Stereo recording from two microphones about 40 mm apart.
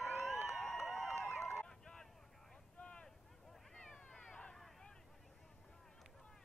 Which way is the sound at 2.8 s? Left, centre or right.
Left.